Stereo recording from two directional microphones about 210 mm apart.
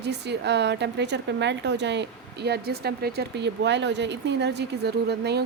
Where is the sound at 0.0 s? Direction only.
55° right (ahead or behind).